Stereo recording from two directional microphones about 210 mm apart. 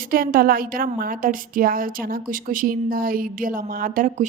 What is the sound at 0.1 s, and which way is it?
A woman's voice, 45° right (ahead or behind).